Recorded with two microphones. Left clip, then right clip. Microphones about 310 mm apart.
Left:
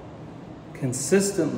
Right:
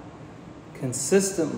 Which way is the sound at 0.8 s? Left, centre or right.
Centre.